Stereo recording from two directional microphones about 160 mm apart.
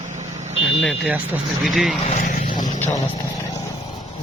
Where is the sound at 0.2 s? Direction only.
45° right (ahead or behind).